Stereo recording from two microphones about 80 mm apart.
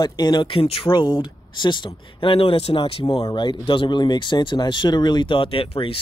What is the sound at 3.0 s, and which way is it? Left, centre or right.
Speech, left.